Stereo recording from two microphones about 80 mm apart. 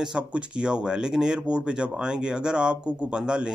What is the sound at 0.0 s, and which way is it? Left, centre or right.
Speech, centre.